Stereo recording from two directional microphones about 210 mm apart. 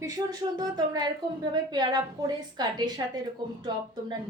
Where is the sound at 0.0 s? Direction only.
20° right (ahead or behind).